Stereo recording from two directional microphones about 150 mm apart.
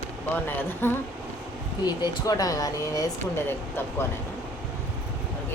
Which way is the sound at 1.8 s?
25° left (ahead or behind).